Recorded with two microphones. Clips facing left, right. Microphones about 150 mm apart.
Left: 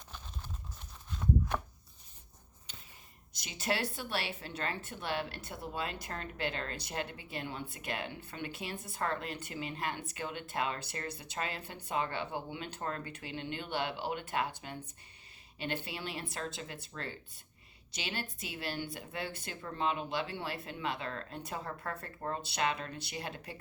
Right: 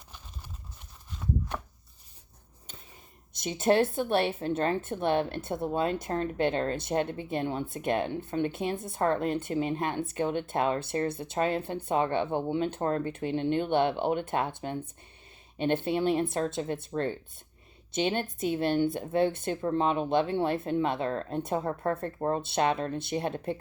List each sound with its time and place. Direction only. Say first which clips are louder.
3.4 s speech: right 11 dB; 50° right (ahead or behind)
16.0 s speech: right 14 dB; 50° right (ahead or behind)
18.2 s speech: right 13 dB; 50° right (ahead or behind)
21.6 s speech: right 11 dB; 25° right (ahead or behind)
22.4 s speech: right 5 dB; 50° right (ahead or behind)